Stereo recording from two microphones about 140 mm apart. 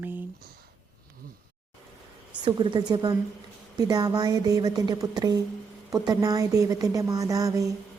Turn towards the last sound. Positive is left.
turn(degrees=-25)  # may be behind; listen again after turning